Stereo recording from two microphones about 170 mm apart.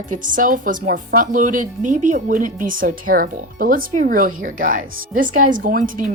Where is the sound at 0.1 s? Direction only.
50° right (ahead or behind).